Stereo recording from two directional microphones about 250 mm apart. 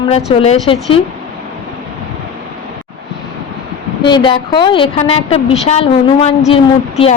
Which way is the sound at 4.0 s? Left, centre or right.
Centre.